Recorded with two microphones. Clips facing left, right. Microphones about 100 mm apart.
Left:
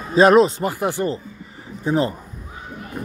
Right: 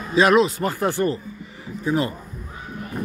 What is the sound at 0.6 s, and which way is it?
Speech, 15° left (ahead or behind).